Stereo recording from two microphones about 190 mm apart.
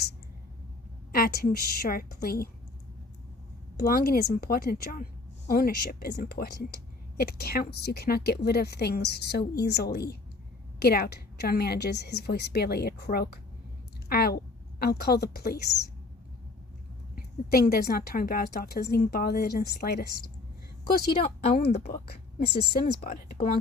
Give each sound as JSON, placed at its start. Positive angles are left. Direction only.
{"t": 1.1, "sound": "a woman's voice", "side_deg": 55}
{"t": 3.8, "sound": "a woman's voice", "side_deg": 55}
{"t": 17.5, "sound": "a woman's voice", "side_deg": 55}
{"t": 21.2, "sound": "speech", "side_deg": 30}
{"t": 22.0, "sound": "a woman's voice", "side_deg": 55}